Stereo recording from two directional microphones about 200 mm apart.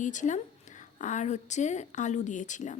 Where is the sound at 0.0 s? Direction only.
40° left (ahead or behind).